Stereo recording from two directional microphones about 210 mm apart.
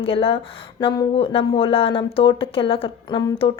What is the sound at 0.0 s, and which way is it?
A woman's voice, 25° left (ahead or behind).